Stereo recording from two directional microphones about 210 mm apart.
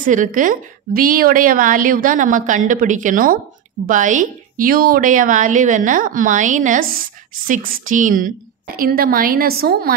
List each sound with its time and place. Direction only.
0.0 s a woman's voice: 40° right (ahead or behind)